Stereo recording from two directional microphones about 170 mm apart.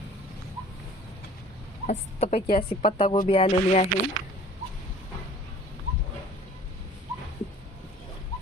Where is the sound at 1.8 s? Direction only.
40° left (ahead or behind).